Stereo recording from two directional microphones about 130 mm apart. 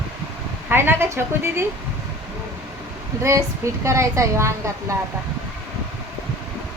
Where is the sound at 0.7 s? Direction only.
15° right (ahead or behind).